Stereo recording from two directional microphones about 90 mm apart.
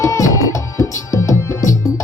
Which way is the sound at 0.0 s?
40° left (ahead or behind).